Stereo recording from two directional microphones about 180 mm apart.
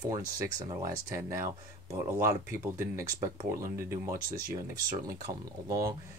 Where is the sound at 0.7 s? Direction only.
15° right (ahead or behind).